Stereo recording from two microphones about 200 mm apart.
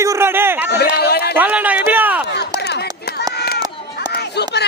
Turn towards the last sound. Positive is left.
turn(degrees=55)  # may be behind; listen again after turning